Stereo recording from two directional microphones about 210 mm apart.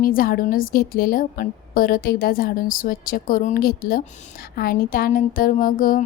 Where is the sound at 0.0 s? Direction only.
45° left (ahead or behind).